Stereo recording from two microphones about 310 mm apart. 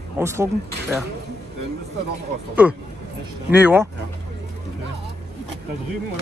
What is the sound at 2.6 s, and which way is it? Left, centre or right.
A man's voice, centre.